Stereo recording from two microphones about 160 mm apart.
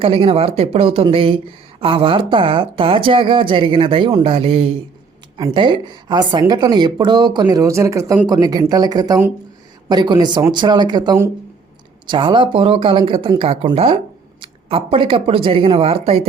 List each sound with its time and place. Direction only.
0.0 s a woman's voice: 35° right (ahead or behind)